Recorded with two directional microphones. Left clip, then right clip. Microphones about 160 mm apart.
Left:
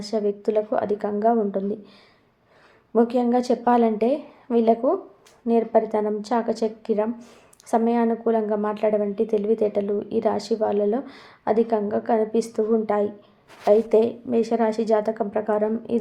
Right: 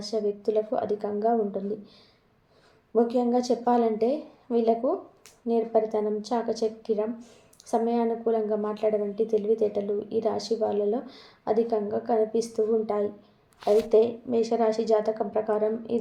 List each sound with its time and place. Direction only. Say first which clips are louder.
0.0 s a woman's voice: left 3 dB; 30° left (ahead or behind)
2.9 s a woman's voice: left 3 dB; 30° left (ahead or behind)
13.7 s a woman's voice: left 3 dB; 45° left (ahead or behind)